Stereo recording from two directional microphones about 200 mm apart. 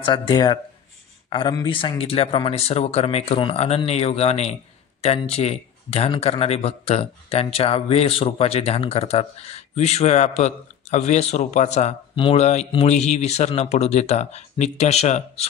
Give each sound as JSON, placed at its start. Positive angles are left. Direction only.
{"t": 0.0, "sound": "a man's voice", "side_deg": 25}